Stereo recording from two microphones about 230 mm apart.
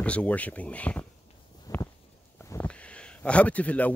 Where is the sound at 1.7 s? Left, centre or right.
Centre.